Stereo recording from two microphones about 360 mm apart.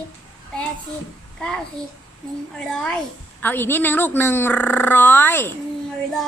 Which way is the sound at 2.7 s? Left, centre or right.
Centre.